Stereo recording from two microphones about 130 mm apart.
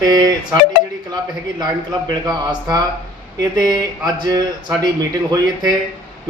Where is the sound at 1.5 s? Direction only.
30° right (ahead or behind).